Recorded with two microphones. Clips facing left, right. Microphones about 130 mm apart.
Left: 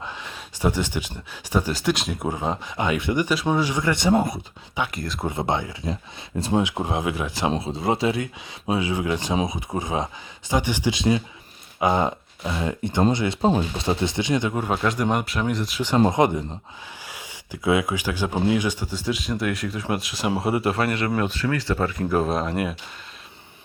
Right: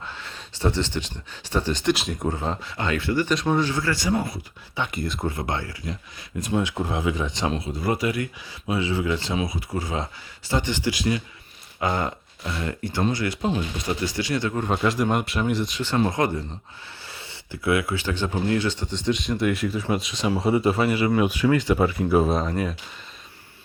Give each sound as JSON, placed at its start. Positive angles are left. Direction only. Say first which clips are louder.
{"t": 0.0, "sound": "speech", "louder": "left 2 dB", "side_deg": 15}
{"t": 2.2, "sound": "speech", "louder": "left 1 dB", "side_deg": 15}
{"t": 4.9, "sound": "speech", "louder": "right 2 dB", "side_deg": 0}
{"t": 5.2, "sound": "speech", "louder": "left 6 dB", "side_deg": 20}
{"t": 7.5, "sound": "speech", "louder": "left 2 dB", "side_deg": 25}
{"t": 14.8, "sound": "speech", "louder": "even", "side_deg": 0}
{"t": 16.0, "sound": "speech", "louder": "left 4 dB", "side_deg": 20}